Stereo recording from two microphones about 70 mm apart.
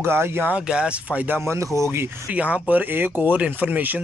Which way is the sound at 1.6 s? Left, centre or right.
Right.